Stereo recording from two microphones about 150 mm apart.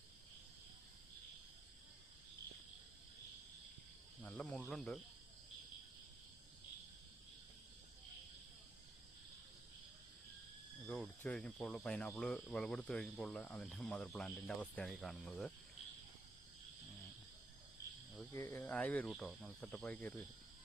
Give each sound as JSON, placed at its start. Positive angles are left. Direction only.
{"t": 4.2, "sound": "cricket", "side_deg": 10}
{"t": 10.8, "sound": "speech", "side_deg": 5}
{"t": 18.3, "sound": "speech", "side_deg": 20}